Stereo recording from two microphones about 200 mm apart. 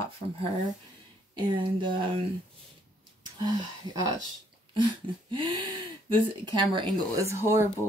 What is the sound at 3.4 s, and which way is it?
Speech, 20° right (ahead or behind).